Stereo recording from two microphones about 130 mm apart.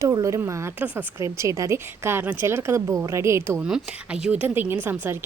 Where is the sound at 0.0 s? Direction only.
25° right (ahead or behind).